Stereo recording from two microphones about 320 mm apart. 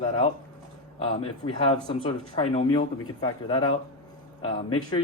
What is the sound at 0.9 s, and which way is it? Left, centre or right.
Speech, centre.